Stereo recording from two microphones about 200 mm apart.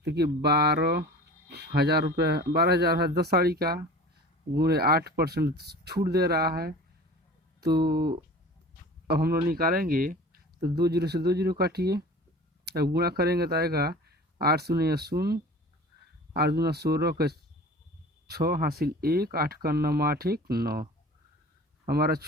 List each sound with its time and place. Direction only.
0.0 s speech: 55° right (ahead or behind)
7.9 s speech: 50° right (ahead or behind)
21.8 s speech: 50° right (ahead or behind)